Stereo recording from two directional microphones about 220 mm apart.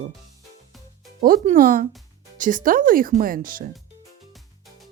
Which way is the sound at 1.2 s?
40° right (ahead or behind).